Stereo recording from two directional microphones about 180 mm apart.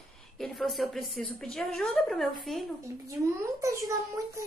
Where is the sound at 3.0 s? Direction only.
15° right (ahead or behind).